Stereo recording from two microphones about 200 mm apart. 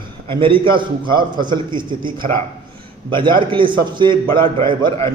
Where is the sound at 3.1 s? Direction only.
25° right (ahead or behind).